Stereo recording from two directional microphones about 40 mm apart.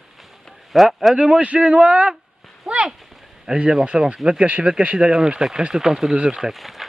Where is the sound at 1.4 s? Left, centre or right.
Right.